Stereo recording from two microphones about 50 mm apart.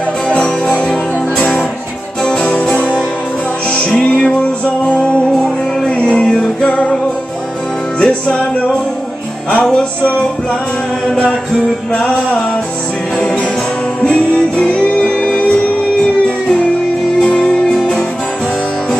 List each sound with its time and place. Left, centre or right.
0.3 s music: left
2.2 s music: centre
8.0 s music: centre
9.5 s music: left
14.0 s music: centre
17.2 s music: left